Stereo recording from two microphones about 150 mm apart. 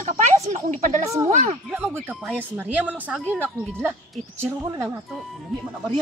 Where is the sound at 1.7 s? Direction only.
10° right (ahead or behind).